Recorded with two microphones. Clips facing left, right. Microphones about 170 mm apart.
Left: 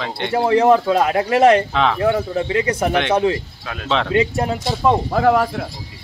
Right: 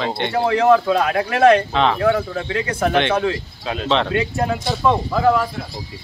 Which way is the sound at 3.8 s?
Centre (ahead or behind).